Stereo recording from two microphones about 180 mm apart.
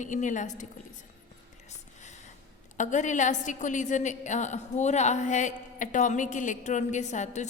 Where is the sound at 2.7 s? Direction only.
45° left (ahead or behind).